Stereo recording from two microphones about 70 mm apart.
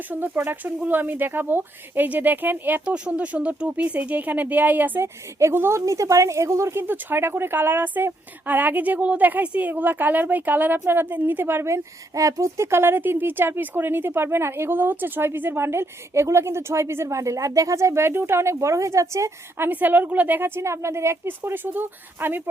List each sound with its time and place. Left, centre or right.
0.1 s speech: right
6.8 s a woman's voice: right
19.5 s speech: right